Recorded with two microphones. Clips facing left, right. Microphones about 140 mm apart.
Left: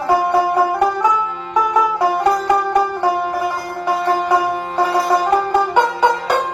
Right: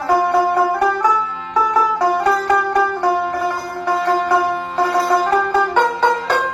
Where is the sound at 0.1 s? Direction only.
15° left (ahead or behind).